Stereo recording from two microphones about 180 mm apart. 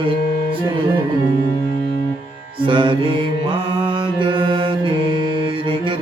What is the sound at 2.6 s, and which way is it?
Mantra, 25° right (ahead or behind).